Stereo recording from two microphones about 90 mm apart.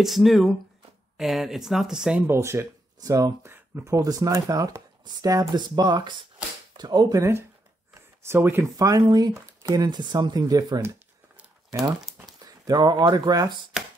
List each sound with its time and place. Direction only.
0.0 s speech: centre (ahead or behind)
2.2 s speech: 30° right (ahead or behind)
3.0 s speech: 40° right (ahead or behind)
3.5 s a sound: 25° right (ahead or behind)
3.9 s speech: 45° right (ahead or behind)
5.6 s speech: 50° right (ahead or behind)
7.2 s speech: 35° right (ahead or behind)
8.7 s speech: 40° right (ahead or behind)
12.4 s speech: 45° right (ahead or behind)